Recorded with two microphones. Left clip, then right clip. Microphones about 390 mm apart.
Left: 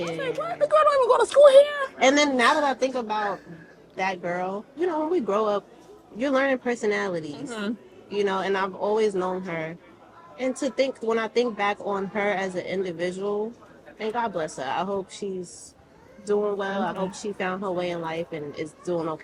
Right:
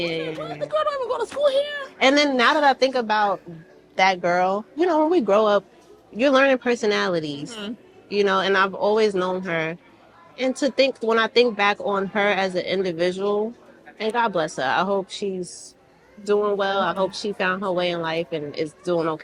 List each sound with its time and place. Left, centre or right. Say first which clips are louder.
0.2 s speech: left 3 dB; left
2.0 s speech: right 2 dB; right